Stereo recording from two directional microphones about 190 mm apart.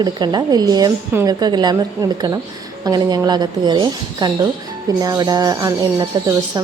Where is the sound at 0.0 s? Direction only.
20° right (ahead or behind).